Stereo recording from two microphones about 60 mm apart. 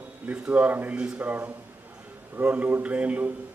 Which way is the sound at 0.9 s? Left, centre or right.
Centre.